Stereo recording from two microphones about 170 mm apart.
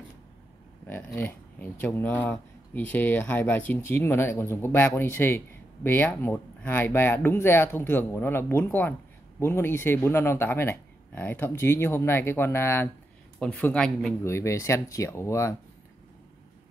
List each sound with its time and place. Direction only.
0.8 s speech: 10° left (ahead or behind)
14.2 s speech: 15° left (ahead or behind)